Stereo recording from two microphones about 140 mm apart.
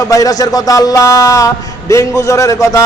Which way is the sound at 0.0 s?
25° left (ahead or behind).